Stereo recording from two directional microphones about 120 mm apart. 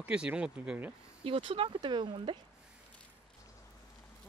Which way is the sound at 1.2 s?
50° right (ahead or behind).